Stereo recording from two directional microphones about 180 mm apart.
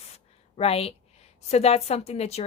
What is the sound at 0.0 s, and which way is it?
A woman's voice, 35° left (ahead or behind).